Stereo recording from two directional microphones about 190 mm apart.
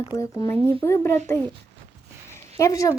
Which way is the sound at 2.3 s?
15° left (ahead or behind).